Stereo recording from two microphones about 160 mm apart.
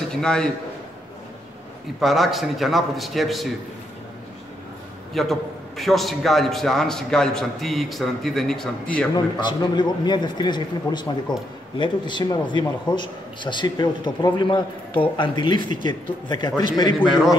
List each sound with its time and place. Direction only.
0.1 s a man's voice: 5° left (ahead or behind)
2.0 s a man's voice: centre (ahead or behind)
5.1 s a man's voice: centre (ahead or behind)
9.1 s a man's voice: 30° left (ahead or behind)